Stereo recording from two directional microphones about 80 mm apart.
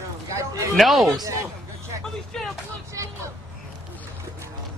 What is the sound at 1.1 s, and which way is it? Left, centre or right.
Speech, right.